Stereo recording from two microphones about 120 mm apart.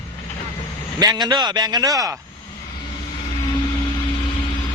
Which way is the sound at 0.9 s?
30° right (ahead or behind).